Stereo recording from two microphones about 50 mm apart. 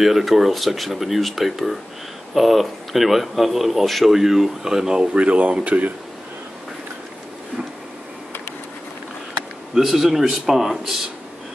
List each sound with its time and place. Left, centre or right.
0.0 s a man's voice: centre; by 5.9 s right
9.8 s speech: centre